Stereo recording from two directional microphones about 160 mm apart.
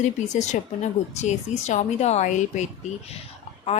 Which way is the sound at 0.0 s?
50° left (ahead or behind).